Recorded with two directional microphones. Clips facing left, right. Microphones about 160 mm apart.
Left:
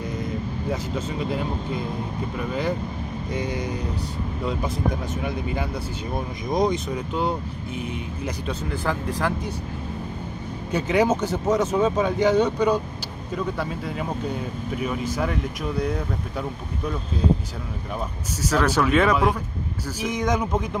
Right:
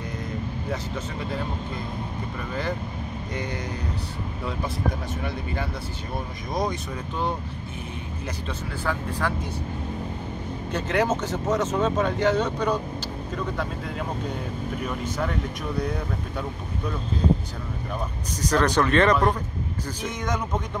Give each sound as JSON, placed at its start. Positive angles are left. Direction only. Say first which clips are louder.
{"t": 3.3, "sound": "speech", "louder": "left 4 dB", "side_deg": 10}
{"t": 5.2, "sound": "speech", "louder": "left 2 dB", "side_deg": 15}
{"t": 8.5, "sound": "speech", "louder": "left 2 dB", "side_deg": 10}
{"t": 10.7, "sound": "speech", "louder": "left 4 dB", "side_deg": 10}
{"t": 18.4, "sound": "speech", "louder": "even", "side_deg": 5}